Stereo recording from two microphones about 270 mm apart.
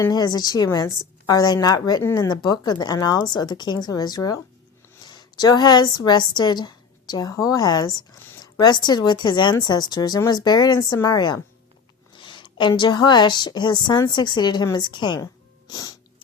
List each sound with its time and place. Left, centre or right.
0.0 s a woman's voice: centre
15.7 s music: centre